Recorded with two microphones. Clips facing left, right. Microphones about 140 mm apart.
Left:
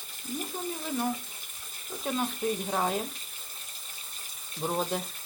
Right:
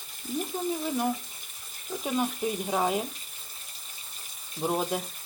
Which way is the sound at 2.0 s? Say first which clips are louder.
Right 1 dB; 5° right (ahead or behind).